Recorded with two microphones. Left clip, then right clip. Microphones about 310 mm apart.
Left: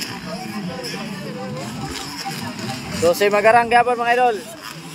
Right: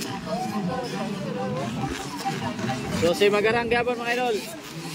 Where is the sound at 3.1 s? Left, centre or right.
Centre.